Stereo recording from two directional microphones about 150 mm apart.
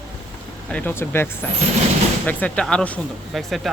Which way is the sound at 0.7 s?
10° left (ahead or behind).